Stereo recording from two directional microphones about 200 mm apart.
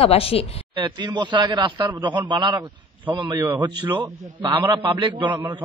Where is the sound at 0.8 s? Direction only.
20° right (ahead or behind).